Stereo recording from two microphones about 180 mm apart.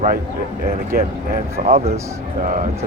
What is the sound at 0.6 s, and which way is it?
Speech, 55° right (ahead or behind).